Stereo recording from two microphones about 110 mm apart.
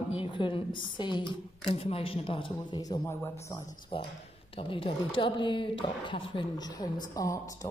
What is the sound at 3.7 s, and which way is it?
Speech, 50° left (ahead or behind).